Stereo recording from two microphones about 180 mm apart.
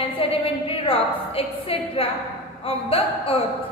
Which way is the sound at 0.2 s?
30° left (ahead or behind).